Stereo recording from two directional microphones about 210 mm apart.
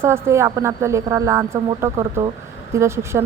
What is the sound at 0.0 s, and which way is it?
Speech, 10° right (ahead or behind).